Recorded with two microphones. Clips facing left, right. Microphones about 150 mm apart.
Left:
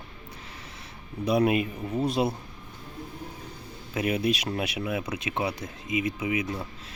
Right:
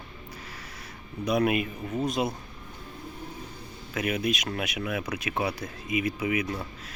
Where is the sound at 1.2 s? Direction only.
30° left (ahead or behind).